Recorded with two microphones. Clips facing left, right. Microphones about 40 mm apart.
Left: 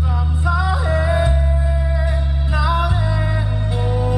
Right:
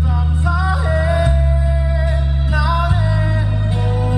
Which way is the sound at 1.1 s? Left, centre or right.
Left.